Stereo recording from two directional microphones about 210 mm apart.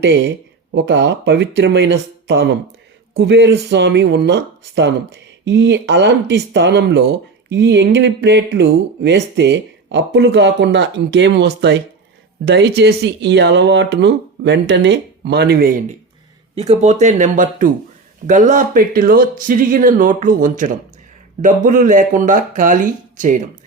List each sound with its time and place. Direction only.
0.0 s speech: 55° right (ahead or behind)
16.6 s speech: 30° right (ahead or behind)